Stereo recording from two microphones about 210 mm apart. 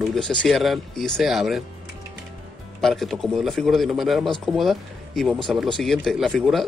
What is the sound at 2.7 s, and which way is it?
A man's voice, centre (ahead or behind).